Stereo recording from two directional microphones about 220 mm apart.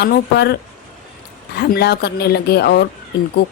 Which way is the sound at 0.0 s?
45° left (ahead or behind).